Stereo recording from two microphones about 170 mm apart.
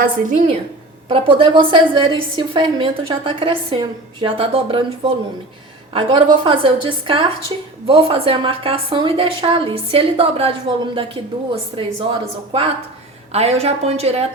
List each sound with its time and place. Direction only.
0.0 s a woman's voice: 50° right (ahead or behind)
1.0 s a woman's voice: 30° right (ahead or behind)